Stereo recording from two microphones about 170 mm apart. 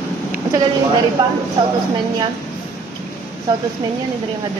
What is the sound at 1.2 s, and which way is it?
Speech, 25° right (ahead or behind).